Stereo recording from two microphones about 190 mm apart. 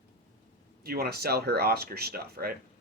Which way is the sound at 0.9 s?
55° right (ahead or behind).